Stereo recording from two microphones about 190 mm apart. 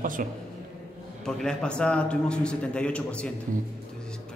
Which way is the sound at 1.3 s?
5° left (ahead or behind).